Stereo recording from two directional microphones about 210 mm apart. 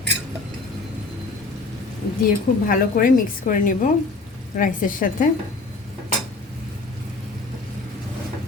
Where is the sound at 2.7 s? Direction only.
40° left (ahead or behind).